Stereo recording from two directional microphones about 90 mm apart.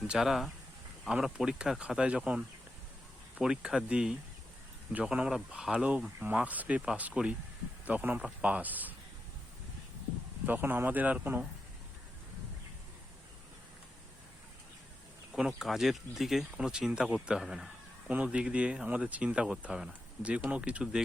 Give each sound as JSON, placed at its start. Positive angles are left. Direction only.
{"t": 0.1, "sound": "speech", "side_deg": -5}
{"t": 10.4, "sound": "speech", "side_deg": -20}
{"t": 15.3, "sound": "speech", "side_deg": -10}